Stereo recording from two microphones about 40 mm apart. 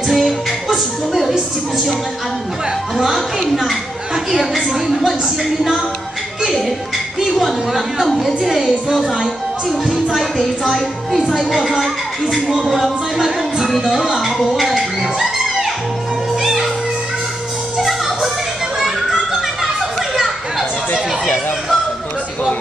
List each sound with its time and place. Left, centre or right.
0.1 s music: centre
3.3 s a woman's voice: centre
7.3 s a woman's voice: centre
10.1 s a woman's voice: centre
13.8 s music: centre
17.7 s music: centre
18.8 s children playing: centre